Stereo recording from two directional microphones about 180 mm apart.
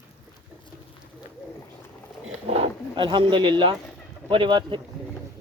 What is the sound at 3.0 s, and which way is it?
Speech, 25° right (ahead or behind).